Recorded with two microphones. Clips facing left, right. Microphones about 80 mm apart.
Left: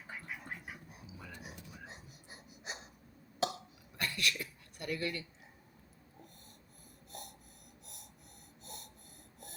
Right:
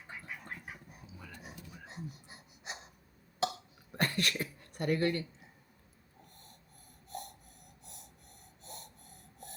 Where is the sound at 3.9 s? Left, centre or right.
Right.